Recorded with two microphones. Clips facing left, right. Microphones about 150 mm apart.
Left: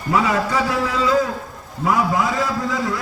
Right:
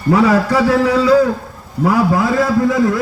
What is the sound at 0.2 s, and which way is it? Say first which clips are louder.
Speech: right 5 dB; 65° right (ahead or behind).